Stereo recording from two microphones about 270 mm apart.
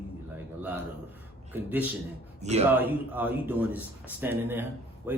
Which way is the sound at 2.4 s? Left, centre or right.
Right.